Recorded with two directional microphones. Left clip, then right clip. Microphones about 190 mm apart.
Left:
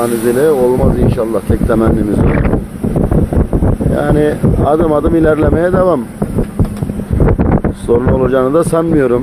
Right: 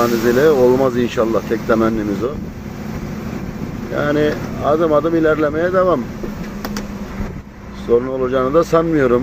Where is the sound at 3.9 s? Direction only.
30° left (ahead or behind).